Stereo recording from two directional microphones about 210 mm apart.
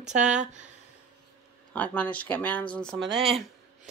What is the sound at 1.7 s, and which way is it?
Speech, 5° left (ahead or behind).